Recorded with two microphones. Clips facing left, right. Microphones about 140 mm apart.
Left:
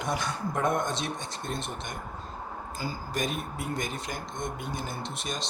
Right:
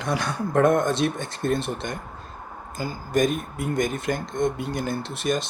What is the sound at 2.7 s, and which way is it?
Speech, 50° right (ahead or behind).